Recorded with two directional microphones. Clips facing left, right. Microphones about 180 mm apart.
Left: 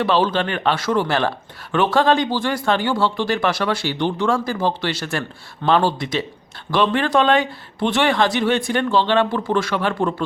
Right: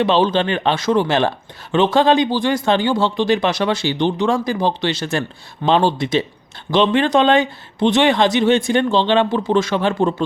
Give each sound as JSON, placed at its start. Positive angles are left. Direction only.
{"t": 0.0, "sound": "speech", "side_deg": -20}